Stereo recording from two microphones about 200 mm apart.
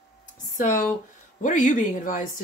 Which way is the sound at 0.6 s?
40° left (ahead or behind).